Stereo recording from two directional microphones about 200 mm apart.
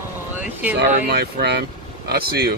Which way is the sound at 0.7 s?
55° right (ahead or behind).